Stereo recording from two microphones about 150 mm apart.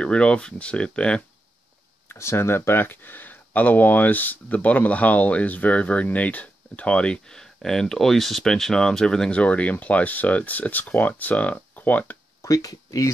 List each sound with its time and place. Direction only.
0.0 s speech: 5° left (ahead or behind)
2.0 s speech: 15° left (ahead or behind)
12.4 s speech: 25° left (ahead or behind)